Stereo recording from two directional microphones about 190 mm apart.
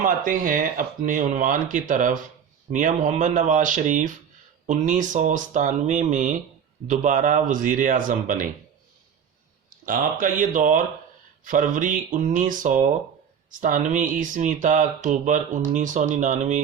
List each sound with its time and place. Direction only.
0.0 s speech: 45° right (ahead or behind)
9.8 s speech: 45° right (ahead or behind)